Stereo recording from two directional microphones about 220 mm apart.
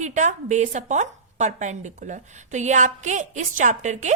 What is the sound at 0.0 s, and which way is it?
A woman's voice, 35° right (ahead or behind).